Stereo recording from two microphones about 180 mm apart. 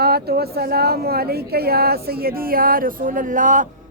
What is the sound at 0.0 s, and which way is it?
Speech, 60° right (ahead or behind).